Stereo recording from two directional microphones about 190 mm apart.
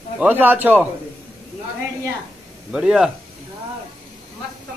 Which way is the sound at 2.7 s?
5° right (ahead or behind).